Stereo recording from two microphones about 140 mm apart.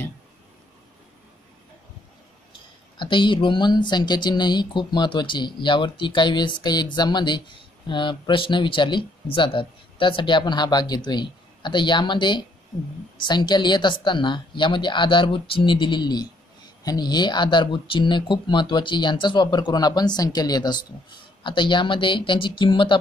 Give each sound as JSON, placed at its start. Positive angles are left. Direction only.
{"t": 3.0, "sound": "speech", "side_deg": 35}